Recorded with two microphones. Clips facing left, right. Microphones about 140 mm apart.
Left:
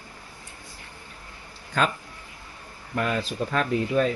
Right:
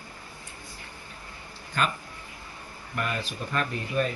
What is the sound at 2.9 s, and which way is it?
Speech, 90° left.